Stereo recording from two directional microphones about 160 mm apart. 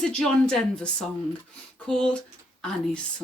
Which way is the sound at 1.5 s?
5° left (ahead or behind).